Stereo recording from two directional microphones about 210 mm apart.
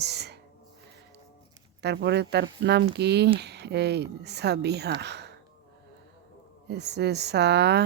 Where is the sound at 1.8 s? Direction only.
50° right (ahead or behind).